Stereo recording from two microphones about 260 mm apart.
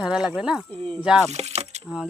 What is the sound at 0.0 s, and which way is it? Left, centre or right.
Speech, centre.